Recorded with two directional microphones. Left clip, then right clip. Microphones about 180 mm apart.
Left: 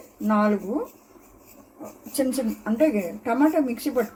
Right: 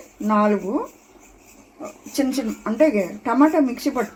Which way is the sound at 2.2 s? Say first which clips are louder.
Right 2 dB; 35° right (ahead or behind).